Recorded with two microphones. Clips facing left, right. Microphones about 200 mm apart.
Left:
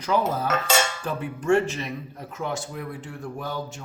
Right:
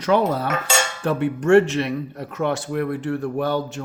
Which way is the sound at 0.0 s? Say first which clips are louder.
Right 5 dB; 70° right (ahead or behind).